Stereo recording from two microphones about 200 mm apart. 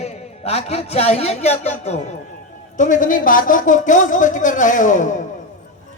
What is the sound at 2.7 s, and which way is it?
Speech, 40° left (ahead or behind).